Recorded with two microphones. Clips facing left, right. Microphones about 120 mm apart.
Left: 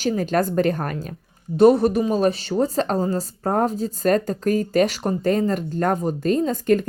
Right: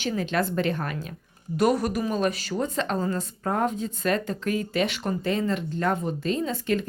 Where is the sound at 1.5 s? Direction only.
30° left (ahead or behind).